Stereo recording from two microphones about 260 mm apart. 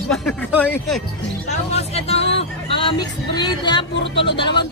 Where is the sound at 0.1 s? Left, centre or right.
Centre.